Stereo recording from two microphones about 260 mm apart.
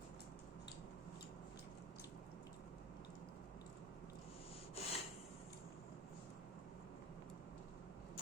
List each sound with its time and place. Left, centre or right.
4.7 s rub: left